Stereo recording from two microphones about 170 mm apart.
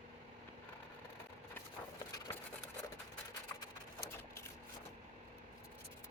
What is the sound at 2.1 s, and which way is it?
Wood, 20° left (ahead or behind).